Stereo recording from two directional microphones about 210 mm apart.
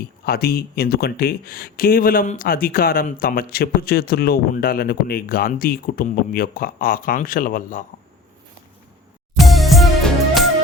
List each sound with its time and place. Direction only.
0.3 s speech: 45° left (ahead or behind)
9.3 s music: centre (ahead or behind)